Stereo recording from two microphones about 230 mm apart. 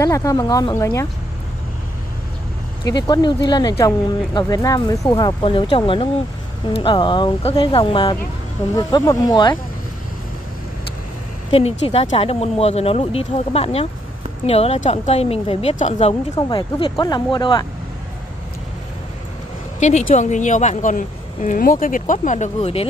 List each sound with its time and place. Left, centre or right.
0.0 s speech: centre
2.8 s speech: centre
11.9 s speech: left
19.8 s a woman's voice: left